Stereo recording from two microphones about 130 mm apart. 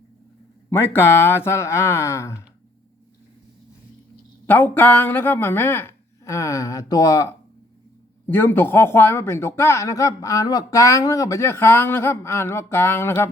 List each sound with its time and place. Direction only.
0.7 s speech: 20° left (ahead or behind)
4.4 s speech: 15° left (ahead or behind)
8.3 s speech: 15° left (ahead or behind)